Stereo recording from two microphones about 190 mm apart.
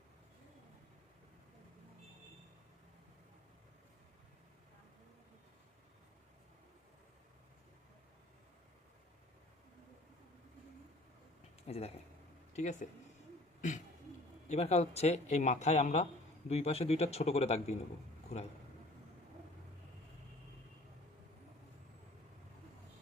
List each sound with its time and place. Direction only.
11.7 s a man's voice: 35° left (ahead or behind)
13.6 s throat clearing: 40° left (ahead or behind)
14.4 s a man's voice: 35° left (ahead or behind)